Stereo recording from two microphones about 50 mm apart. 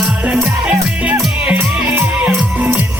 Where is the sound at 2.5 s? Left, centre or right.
Right.